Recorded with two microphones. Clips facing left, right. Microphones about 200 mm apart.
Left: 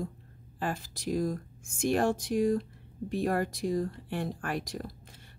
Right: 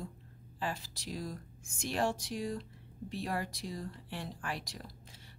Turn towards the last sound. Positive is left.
turn(degrees=50)  # may be behind; listen again after turning